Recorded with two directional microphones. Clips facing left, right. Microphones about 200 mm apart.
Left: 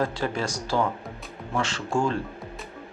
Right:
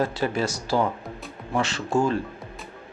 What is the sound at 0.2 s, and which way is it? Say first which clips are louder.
Speech: right 3 dB; 15° right (ahead or behind).